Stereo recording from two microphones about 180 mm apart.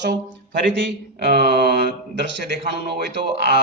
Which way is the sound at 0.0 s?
75° right (ahead or behind).